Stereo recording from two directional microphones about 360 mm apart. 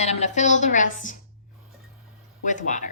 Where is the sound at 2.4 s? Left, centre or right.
Left.